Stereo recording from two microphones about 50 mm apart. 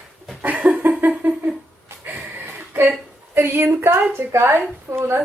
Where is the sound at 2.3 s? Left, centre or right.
Right.